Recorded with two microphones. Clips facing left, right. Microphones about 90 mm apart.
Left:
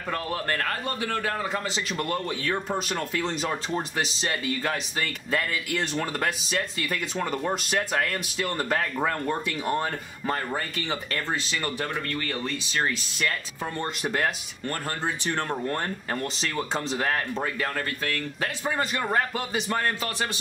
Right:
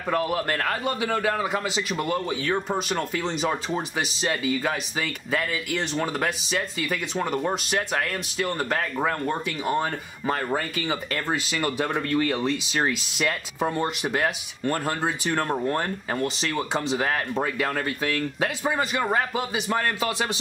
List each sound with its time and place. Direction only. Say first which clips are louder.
0.1 s a man's voice: right 4 dB; 10° right (ahead or behind)